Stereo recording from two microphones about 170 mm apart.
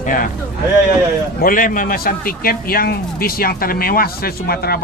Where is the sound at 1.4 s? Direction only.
55° left (ahead or behind).